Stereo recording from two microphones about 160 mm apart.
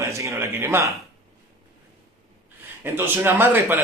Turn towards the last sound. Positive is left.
turn(degrees=-15)  # may be behind; listen again after turning